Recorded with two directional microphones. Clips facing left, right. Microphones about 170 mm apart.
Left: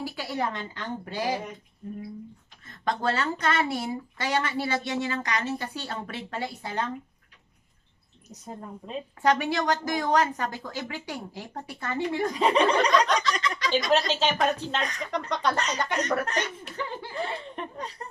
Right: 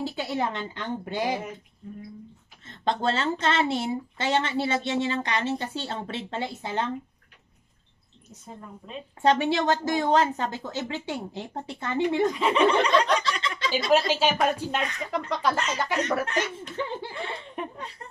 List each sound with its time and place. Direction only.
0.0 s speech: 25° right (ahead or behind)
2.6 s speech: 25° right (ahead or behind)
9.2 s speech: 25° right (ahead or behind)
12.4 s speech: 35° left (ahead or behind)
12.9 s a sound: 30° right (ahead or behind)
13.8 s speech: 10° right (ahead or behind)
16.5 s speech: 25° right (ahead or behind)
17.7 s speech: 40° left (ahead or behind)